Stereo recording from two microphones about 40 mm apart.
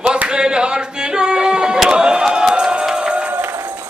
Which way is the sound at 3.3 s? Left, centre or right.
Right.